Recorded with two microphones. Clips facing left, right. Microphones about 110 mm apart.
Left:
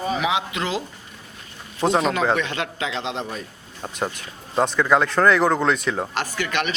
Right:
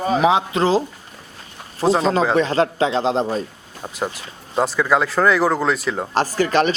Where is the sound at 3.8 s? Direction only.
5° right (ahead or behind).